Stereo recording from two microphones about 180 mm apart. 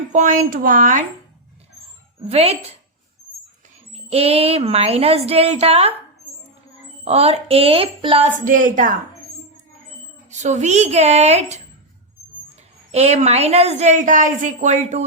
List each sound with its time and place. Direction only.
0.1 s speech: 45° right (ahead or behind)
2.2 s a woman's voice: 35° right (ahead or behind)
3.9 s a woman's voice: 35° right (ahead or behind)
7.0 s a woman's voice: 35° right (ahead or behind)
8.4 s speech: 45° right (ahead or behind)
10.2 s a woman's voice: 40° right (ahead or behind)
12.9 s a woman's voice: 35° right (ahead or behind)